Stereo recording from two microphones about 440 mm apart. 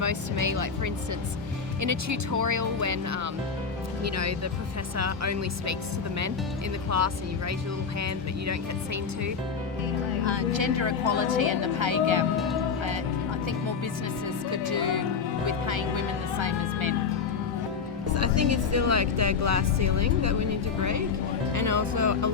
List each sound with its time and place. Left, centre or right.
0.0 s speech: right
1.8 s speech: right
6.9 s speech: right
10.2 s speech: right
14.5 s speech: right
18.1 s speech: right